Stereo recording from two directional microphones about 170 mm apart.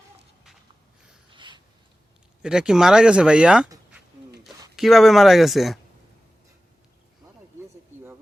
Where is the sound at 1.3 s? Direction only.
25° right (ahead or behind).